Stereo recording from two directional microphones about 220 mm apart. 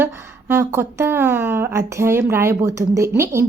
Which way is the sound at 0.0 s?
10° right (ahead or behind).